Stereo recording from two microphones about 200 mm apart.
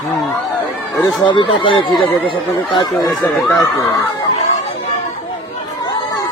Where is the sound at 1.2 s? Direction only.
25° left (ahead or behind).